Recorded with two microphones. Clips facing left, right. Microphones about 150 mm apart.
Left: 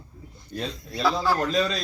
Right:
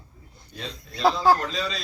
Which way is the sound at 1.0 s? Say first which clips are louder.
Right 4 dB; 45° right (ahead or behind).